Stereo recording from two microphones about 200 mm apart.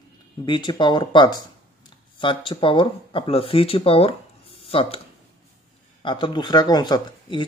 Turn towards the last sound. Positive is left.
turn(degrees=20)  # may be behind; listen again after turning